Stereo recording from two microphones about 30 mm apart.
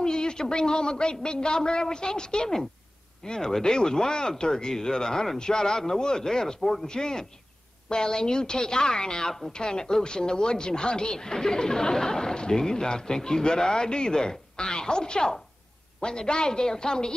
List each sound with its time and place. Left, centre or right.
0.0 s a man's voice: left; by 6.9 s centre
6.9 s speech: left